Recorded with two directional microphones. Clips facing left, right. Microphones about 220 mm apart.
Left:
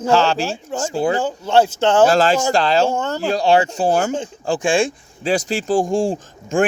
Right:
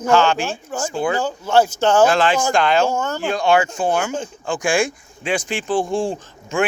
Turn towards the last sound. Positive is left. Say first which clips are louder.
# left 3 dB
turn(degrees=45)  # may be behind; listen again after turning